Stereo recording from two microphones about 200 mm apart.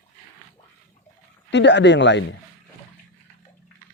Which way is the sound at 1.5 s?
60° left (ahead or behind).